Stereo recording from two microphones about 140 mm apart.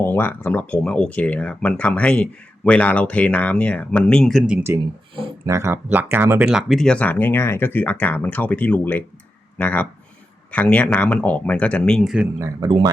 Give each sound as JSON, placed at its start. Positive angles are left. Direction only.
{"t": 0.0, "sound": "speech", "side_deg": 15}
{"t": 4.7, "sound": "speech", "side_deg": -15}
{"t": 6.5, "sound": "speech", "side_deg": 0}
{"t": 12.1, "sound": "speech", "side_deg": -10}